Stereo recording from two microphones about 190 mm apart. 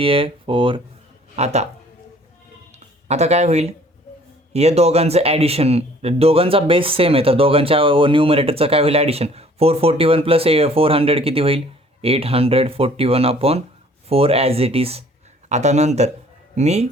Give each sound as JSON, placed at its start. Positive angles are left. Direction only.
{"t": 0.0, "sound": "speech", "side_deg": -30}
{"t": 3.1, "sound": "speech", "side_deg": -35}